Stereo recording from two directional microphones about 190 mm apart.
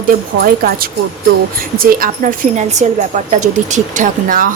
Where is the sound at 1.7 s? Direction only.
50° right (ahead or behind).